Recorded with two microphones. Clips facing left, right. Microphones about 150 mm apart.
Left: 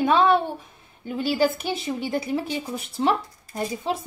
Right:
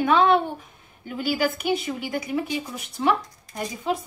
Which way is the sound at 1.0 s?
30° left (ahead or behind).